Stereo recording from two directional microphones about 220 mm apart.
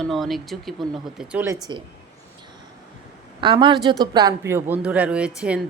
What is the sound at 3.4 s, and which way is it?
A woman's voice, 20° right (ahead or behind).